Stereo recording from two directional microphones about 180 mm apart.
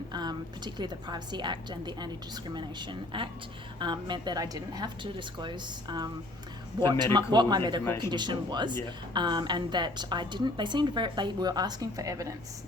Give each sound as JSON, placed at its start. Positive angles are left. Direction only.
{"t": 0.1, "sound": "a woman's voice", "side_deg": -25}